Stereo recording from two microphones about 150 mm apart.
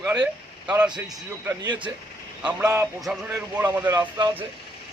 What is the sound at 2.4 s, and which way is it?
A man's voice, 10° right (ahead or behind).